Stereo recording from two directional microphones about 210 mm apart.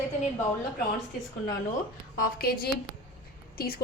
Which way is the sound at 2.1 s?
45° left (ahead or behind).